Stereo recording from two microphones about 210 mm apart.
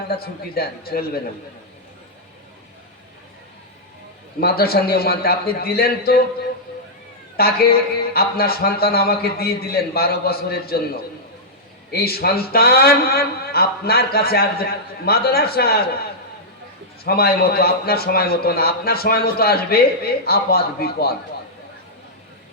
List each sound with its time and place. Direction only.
0.2 s a man's voice: 45° left (ahead or behind)
4.4 s a man's voice: 45° left (ahead or behind)
7.3 s a man's voice: 45° left (ahead or behind)
11.9 s a man's voice: 45° left (ahead or behind)
17.0 s a man's voice: 45° left (ahead or behind)